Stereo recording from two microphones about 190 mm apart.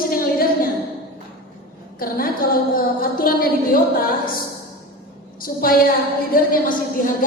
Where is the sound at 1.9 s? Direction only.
50° left (ahead or behind).